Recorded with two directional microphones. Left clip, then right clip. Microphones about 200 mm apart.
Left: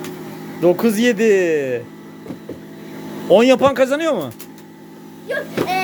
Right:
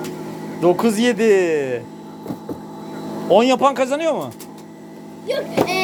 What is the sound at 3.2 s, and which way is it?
A man's voice, 35° left (ahead or behind).